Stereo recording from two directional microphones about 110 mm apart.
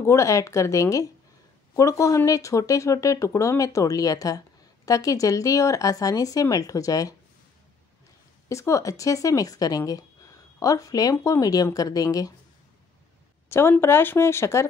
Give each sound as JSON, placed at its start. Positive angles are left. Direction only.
{"t": 0.0, "sound": "speech", "side_deg": 25}
{"t": 8.5, "sound": "speech", "side_deg": 25}
{"t": 13.5, "sound": "speech", "side_deg": 20}